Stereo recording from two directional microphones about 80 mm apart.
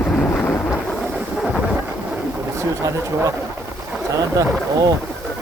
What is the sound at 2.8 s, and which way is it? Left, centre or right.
Speech, right.